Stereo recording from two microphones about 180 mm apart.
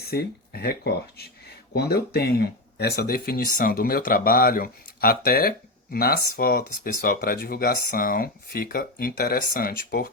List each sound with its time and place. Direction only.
0.0 s speech: 60° left (ahead or behind)